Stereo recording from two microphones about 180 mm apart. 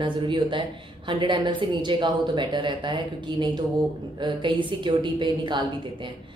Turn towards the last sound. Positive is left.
turn(degrees=-25)  # may be behind; listen again after turning